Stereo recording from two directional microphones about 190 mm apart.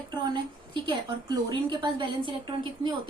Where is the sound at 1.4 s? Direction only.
25° right (ahead or behind).